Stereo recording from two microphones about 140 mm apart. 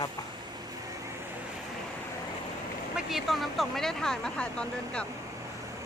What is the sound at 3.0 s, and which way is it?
Speech, centre (ahead or behind).